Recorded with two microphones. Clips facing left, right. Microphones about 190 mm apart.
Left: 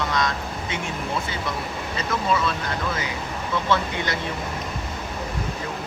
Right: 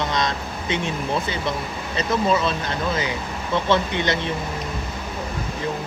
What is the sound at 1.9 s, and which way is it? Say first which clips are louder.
Speech: right 4 dB; 20° right (ahead or behind).